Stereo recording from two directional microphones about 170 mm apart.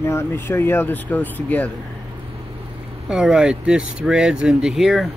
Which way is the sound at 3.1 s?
5° right (ahead or behind).